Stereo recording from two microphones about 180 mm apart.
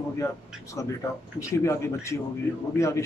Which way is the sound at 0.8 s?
15° left (ahead or behind).